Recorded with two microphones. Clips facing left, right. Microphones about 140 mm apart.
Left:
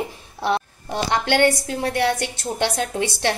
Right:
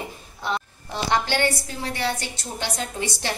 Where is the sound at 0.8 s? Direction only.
55° left (ahead or behind).